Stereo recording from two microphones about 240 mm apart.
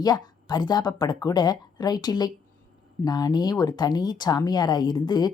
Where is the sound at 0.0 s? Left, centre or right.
Centre.